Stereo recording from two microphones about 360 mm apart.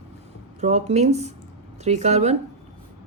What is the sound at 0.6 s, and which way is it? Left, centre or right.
A woman's voice, centre.